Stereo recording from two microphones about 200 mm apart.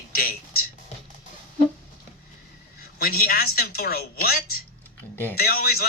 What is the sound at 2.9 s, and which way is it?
A man's voice, 50° left (ahead or behind).